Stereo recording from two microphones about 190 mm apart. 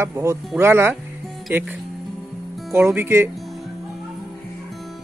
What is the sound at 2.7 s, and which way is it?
Speech, 10° right (ahead or behind).